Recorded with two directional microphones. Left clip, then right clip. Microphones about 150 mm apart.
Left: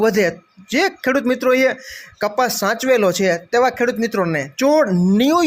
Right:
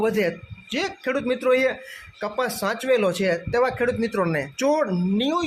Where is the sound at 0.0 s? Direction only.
35° left (ahead or behind).